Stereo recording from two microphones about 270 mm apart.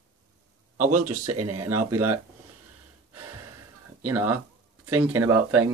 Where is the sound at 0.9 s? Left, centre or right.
Right.